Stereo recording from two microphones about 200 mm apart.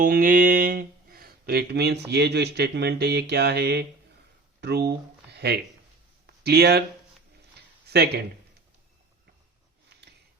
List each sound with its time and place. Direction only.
0.0 s speech: 45° right (ahead or behind)
6.2 s a sound: 55° right (ahead or behind)
7.9 s speech: 55° right (ahead or behind)